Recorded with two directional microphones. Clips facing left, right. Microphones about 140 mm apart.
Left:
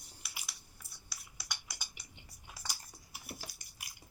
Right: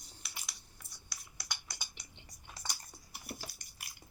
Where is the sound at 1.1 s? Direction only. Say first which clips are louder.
Right 1 dB; 5° left (ahead or behind).